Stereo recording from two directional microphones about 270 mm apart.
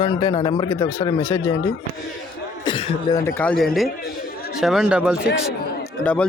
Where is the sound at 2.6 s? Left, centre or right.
Centre.